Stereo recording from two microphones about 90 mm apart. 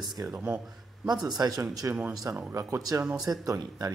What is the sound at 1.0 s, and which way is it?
Speech, 45° right (ahead or behind).